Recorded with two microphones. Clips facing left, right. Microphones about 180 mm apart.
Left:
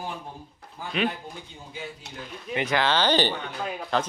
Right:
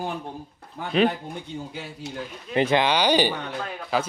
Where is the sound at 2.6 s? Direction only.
30° right (ahead or behind).